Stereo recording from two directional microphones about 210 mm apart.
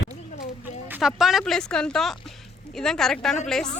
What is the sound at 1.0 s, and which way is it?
Speech, centre (ahead or behind).